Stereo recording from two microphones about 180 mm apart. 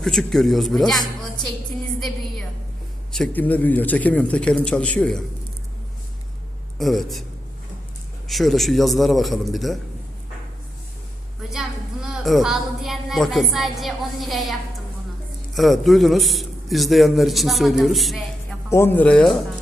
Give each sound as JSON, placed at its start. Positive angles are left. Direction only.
{"t": 0.0, "sound": "a man's voice", "side_deg": 5}
{"t": 3.1, "sound": "a man's voice", "side_deg": 5}
{"t": 6.7, "sound": "a man's voice", "side_deg": 0}
{"t": 8.3, "sound": "a man's voice", "side_deg": 0}
{"t": 12.0, "sound": "a woman's voice", "side_deg": 0}
{"t": 15.5, "sound": "a man's voice", "side_deg": 0}
{"t": 18.7, "sound": "a man's voice", "side_deg": 15}